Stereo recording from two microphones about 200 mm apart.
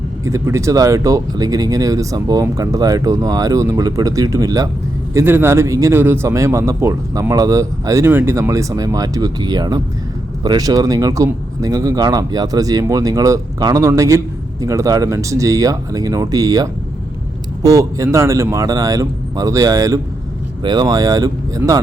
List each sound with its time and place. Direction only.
0.3 s a man's voice: 15° right (ahead or behind)